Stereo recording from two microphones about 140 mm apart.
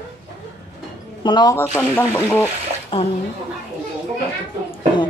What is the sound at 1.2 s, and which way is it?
Speech, 30° left (ahead or behind).